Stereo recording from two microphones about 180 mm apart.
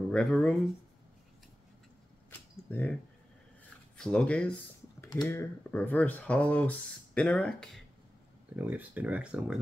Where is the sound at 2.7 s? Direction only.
10° left (ahead or behind).